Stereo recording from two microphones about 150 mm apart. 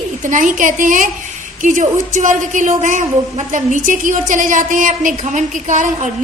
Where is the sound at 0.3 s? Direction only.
60° right (ahead or behind).